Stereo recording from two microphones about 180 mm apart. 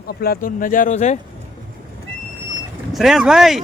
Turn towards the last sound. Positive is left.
turn(degrees=0)  # may be behind; listen again after turning